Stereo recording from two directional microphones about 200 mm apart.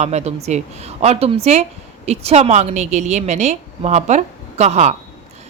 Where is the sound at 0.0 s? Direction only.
35° right (ahead or behind).